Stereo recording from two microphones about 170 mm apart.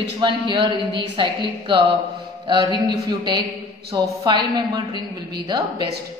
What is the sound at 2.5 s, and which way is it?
Speech, 25° right (ahead or behind).